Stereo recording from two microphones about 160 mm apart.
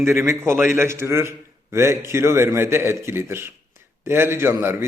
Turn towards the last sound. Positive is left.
turn(degrees=-15)  # may be behind; listen again after turning